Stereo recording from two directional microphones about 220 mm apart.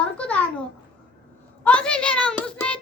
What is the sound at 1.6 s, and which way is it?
A child's voice, 5° left (ahead or behind).